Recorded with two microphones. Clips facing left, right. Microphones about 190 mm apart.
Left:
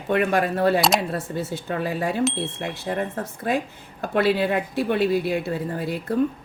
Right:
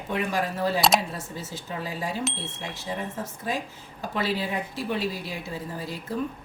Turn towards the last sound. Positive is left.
turn(degrees=60)  # may be behind; listen again after turning